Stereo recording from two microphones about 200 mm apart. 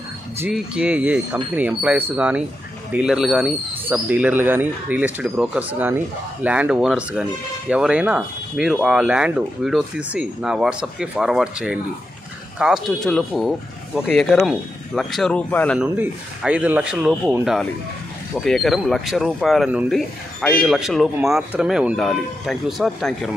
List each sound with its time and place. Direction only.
0.4 s speech: 5° right (ahead or behind)
15.8 s speech: 5° right (ahead or behind)